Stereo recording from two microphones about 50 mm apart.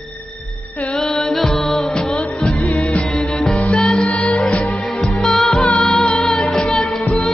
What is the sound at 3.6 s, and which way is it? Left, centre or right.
Music, left.